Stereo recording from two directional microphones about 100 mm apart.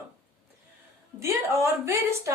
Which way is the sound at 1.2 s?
30° right (ahead or behind).